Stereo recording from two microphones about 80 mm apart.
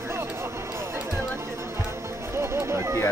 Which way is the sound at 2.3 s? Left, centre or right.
Right.